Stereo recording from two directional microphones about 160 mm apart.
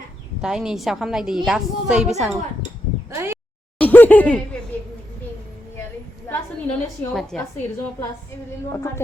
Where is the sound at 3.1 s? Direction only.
15° right (ahead or behind).